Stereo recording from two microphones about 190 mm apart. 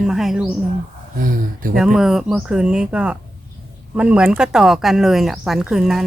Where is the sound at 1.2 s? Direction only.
45° right (ahead or behind).